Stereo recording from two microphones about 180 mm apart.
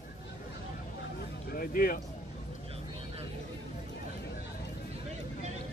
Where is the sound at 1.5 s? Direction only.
55° left (ahead or behind).